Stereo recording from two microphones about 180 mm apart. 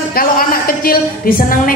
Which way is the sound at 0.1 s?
55° left (ahead or behind).